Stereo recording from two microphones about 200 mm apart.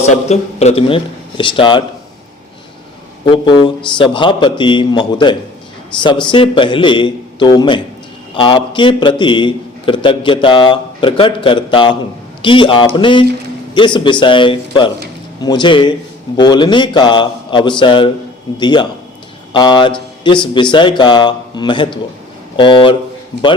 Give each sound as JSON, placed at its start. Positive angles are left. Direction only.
{"t": 0.3, "sound": "a man's voice", "side_deg": 30}
{"t": 3.2, "sound": "a man's voice", "side_deg": 25}